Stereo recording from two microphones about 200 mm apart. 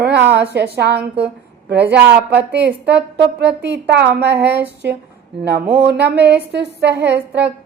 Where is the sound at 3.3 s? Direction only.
60° right (ahead or behind).